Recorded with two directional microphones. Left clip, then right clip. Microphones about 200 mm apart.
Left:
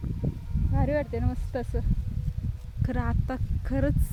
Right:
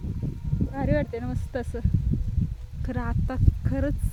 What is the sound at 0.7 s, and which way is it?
Speech, centre (ahead or behind).